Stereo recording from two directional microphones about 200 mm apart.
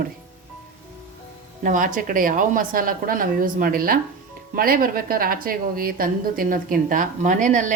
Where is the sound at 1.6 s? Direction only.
40° right (ahead or behind).